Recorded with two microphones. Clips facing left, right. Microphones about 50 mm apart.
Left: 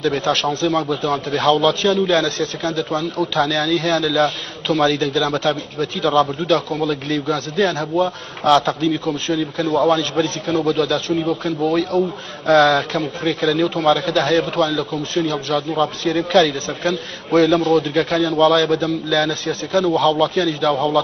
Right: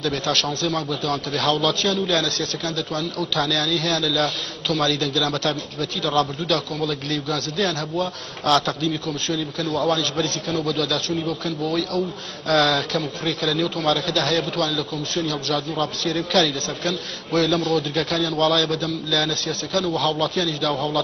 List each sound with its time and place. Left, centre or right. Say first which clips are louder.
0.3 s a man's voice: left 4 dB; left